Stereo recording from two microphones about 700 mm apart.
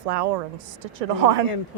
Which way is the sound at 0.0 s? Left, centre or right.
Right.